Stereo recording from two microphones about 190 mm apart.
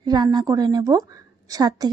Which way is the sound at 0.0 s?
20° right (ahead or behind).